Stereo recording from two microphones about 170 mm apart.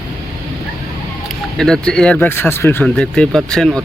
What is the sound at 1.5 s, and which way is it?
Speech, 5° left (ahead or behind).